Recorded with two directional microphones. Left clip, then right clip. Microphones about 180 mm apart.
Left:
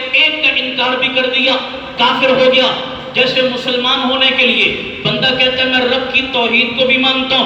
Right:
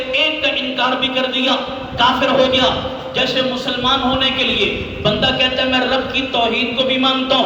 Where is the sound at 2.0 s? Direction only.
20° right (ahead or behind).